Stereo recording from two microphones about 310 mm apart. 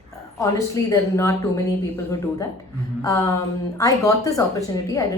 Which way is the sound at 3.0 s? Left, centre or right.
Centre.